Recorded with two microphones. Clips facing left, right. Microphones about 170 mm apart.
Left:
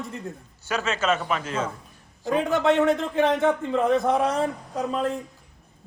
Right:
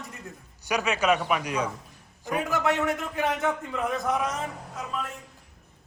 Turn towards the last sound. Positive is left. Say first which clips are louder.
# left 8 dB
turn(degrees=35)  # may be behind; listen again after turning